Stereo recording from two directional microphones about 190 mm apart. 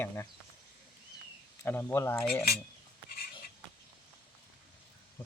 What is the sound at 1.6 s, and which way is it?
Speech, 10° left (ahead or behind).